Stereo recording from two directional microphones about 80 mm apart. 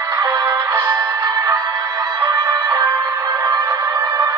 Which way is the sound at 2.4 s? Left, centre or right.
Right.